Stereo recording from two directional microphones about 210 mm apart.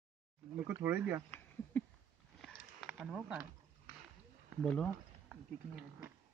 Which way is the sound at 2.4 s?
Centre (ahead or behind).